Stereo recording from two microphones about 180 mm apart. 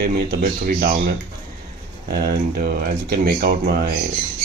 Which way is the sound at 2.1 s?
60° right (ahead or behind).